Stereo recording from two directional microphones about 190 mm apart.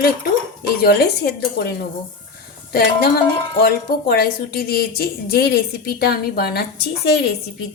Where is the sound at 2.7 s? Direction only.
55° left (ahead or behind).